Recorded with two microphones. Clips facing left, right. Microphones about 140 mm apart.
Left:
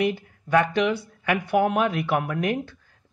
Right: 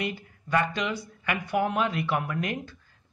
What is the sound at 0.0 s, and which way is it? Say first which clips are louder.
Speech: left 8 dB; 70° left (ahead or behind).